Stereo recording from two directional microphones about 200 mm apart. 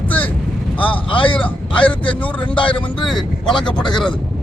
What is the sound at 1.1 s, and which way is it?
Speech, 25° left (ahead or behind).